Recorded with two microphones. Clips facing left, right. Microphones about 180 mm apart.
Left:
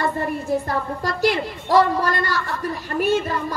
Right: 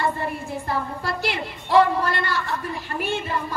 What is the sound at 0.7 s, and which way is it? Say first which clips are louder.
A woman's voice: left 2 dB; 40° left (ahead or behind).